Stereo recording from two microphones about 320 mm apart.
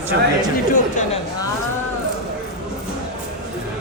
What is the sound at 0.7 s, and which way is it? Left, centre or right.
Speech, left.